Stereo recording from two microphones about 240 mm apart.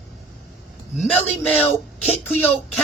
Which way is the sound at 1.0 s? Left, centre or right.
Centre.